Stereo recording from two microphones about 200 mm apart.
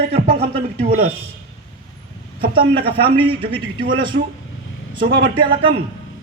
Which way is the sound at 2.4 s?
50° right (ahead or behind).